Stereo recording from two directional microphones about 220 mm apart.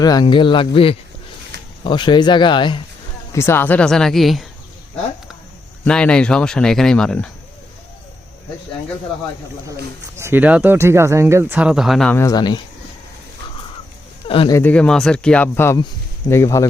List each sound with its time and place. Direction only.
0.0 s speech: 20° left (ahead or behind); by 4.4 s centre (ahead or behind)
5.8 s speech: 5° left (ahead or behind)
10.2 s speech: 10° right (ahead or behind); by 12.6 s 20° left (ahead or behind)
14.3 s speech: 25° left (ahead or behind)
14.5 s speech: 5° left (ahead or behind)